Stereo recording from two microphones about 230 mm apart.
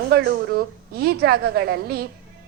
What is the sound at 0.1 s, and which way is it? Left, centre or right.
A woman's voice, right.